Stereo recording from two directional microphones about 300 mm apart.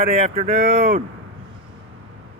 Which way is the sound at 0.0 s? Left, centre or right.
Right.